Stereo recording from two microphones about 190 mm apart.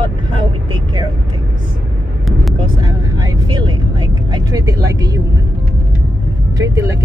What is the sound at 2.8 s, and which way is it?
Speech, 20° right (ahead or behind).